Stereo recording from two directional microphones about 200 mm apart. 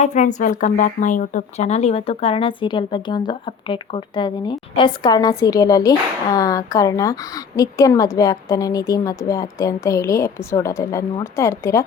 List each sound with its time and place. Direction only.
0.0 s speech: 35° left (ahead or behind); by 11.8 s 15° left (ahead or behind)